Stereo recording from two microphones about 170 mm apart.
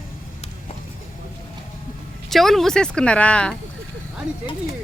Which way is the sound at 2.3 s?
Centre (ahead or behind).